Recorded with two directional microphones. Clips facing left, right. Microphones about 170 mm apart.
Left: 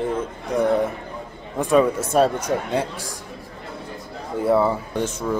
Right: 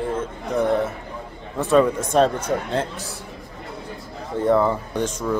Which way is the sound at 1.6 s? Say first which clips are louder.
Even; 10° left (ahead or behind).